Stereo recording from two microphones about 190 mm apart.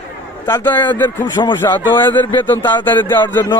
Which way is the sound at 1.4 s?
25° left (ahead or behind).